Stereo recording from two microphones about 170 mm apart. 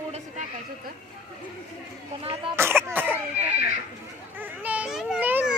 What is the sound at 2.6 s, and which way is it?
Cough, 15° right (ahead or behind).